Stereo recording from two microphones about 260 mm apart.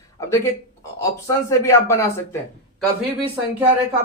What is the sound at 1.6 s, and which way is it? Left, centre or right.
Speech, centre.